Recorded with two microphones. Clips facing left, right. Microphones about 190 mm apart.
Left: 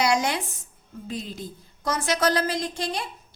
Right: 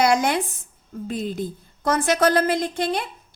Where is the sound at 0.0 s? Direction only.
55° right (ahead or behind).